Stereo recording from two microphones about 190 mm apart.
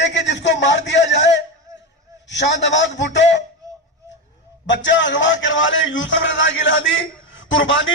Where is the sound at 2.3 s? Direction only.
70° left (ahead or behind).